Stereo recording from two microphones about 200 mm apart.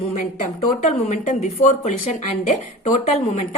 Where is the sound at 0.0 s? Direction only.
35° left (ahead or behind).